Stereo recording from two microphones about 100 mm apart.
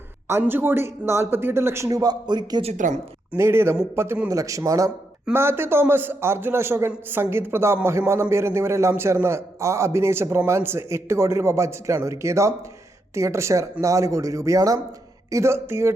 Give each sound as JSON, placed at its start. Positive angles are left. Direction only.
{"t": 0.3, "sound": "a man's voice", "side_deg": -25}
{"t": 3.3, "sound": "a man's voice", "side_deg": -25}
{"t": 5.3, "sound": "a man's voice", "side_deg": -20}